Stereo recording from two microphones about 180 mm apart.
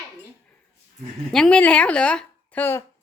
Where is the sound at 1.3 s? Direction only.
5° left (ahead or behind).